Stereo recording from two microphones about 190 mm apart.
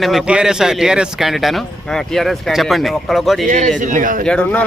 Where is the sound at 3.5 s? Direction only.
40° right (ahead or behind).